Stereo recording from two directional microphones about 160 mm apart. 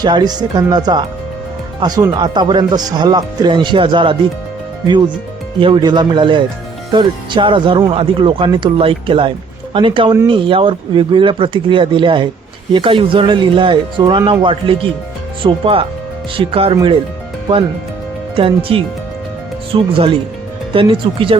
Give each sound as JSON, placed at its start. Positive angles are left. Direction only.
{"t": 0.0, "sound": "speech", "side_deg": -25}
{"t": 5.5, "sound": "speech", "side_deg": -30}
{"t": 18.3, "sound": "speech", "side_deg": -35}